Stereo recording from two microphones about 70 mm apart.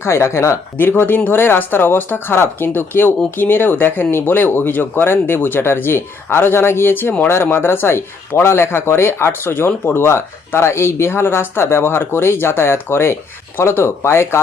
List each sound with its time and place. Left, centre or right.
0.0 s speech: left